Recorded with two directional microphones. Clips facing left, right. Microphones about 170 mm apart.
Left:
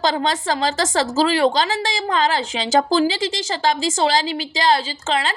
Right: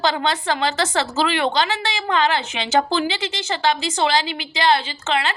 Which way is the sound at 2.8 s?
35° left (ahead or behind).